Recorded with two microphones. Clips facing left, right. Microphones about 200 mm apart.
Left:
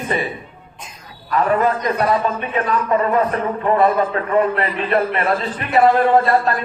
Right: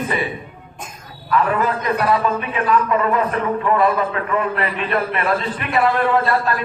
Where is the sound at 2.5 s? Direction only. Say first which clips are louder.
Left 1 dB; 35° left (ahead or behind).